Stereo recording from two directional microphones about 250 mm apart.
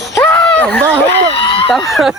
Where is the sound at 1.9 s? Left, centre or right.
Centre.